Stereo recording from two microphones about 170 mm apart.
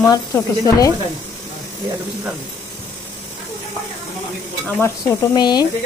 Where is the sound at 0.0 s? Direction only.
20° left (ahead or behind).